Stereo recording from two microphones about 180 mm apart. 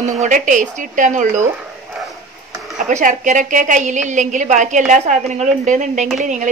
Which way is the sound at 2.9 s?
45° right (ahead or behind).